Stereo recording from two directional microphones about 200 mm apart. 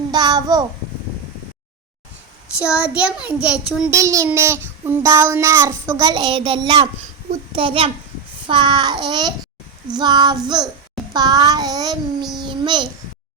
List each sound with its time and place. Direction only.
0.1 s a sound: 20° right (ahead or behind)
2.7 s a child's voice: 5° right (ahead or behind)
3.9 s child singing: 15° right (ahead or behind)
7.5 s a child's voice: 25° right (ahead or behind)